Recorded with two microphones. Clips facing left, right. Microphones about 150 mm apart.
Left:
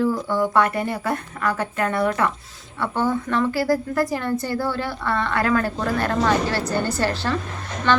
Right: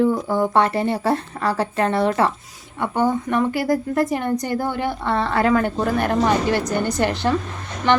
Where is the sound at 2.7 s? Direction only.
15° right (ahead or behind).